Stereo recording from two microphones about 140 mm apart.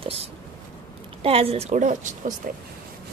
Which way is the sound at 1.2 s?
40° right (ahead or behind).